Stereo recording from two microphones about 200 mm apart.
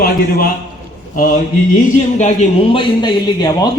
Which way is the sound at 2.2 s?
35° left (ahead or behind).